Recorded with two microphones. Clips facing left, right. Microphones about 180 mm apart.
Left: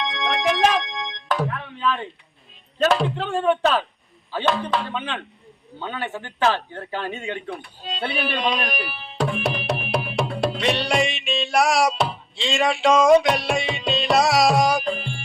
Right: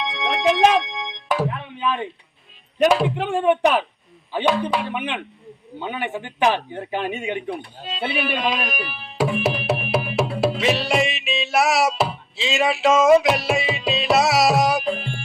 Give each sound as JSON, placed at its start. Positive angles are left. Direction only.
{"t": 0.0, "sound": "music", "side_deg": 0}
{"t": 1.5, "sound": "music", "side_deg": -20}
{"t": 2.7, "sound": "speech", "side_deg": -15}
{"t": 7.9, "sound": "tabla", "side_deg": 0}